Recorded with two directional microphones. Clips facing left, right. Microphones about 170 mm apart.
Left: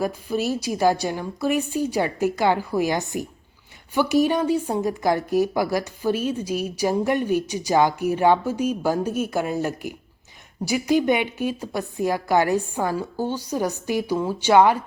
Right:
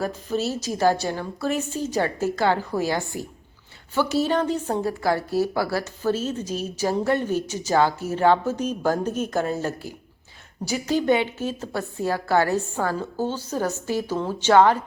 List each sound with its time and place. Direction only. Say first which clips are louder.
0.0 s a woman's voice: left 1 dB; 10° left (ahead or behind)